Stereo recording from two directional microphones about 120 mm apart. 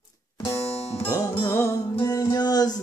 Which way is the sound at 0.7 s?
60° left (ahead or behind).